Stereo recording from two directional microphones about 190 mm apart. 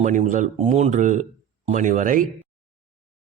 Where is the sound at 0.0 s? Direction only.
40° right (ahead or behind).